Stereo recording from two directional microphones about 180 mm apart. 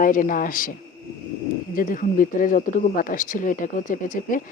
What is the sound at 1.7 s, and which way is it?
Speech, 50° left (ahead or behind).